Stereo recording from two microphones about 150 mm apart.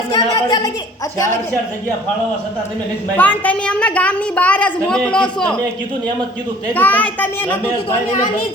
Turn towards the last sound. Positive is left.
turn(degrees=10)  # may be behind; listen again after turning